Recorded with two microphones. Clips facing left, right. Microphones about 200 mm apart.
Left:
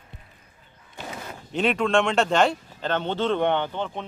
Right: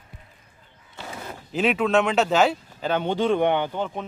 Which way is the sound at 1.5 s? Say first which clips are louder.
Right 1 dB; 5° right (ahead or behind).